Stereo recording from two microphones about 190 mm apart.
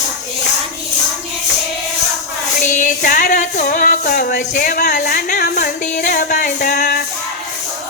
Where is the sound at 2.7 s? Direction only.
45° left (ahead or behind).